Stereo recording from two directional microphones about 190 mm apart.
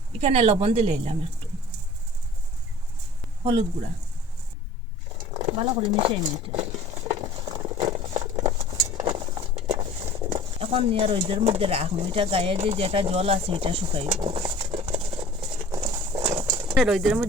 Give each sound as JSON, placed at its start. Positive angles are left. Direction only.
{"t": 0.2, "sound": "speech", "side_deg": -35}
{"t": 5.3, "sound": "a sound", "side_deg": -30}
{"t": 10.3, "sound": "speech", "side_deg": -30}
{"t": 15.7, "sound": "horse", "side_deg": -20}
{"t": 16.2, "sound": "a sound", "side_deg": -30}
{"t": 16.7, "sound": "speech", "side_deg": 0}